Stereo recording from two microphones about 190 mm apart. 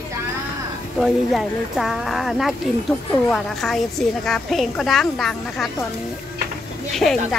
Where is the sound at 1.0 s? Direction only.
Centre (ahead or behind).